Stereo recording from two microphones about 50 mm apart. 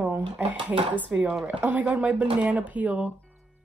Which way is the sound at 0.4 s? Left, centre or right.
Right.